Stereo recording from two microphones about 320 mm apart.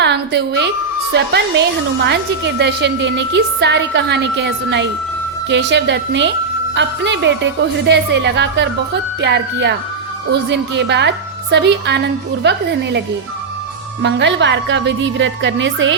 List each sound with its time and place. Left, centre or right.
0.0 s a woman's voice: right
14.0 s a woman's voice: right